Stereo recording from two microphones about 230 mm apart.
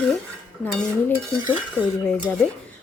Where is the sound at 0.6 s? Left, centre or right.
Centre.